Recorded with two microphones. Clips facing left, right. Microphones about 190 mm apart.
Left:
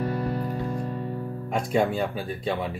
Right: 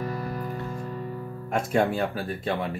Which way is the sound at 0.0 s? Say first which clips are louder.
Left 4 dB; 30° left (ahead or behind).